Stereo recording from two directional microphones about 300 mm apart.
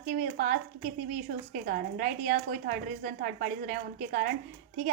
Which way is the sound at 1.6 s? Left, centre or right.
Right.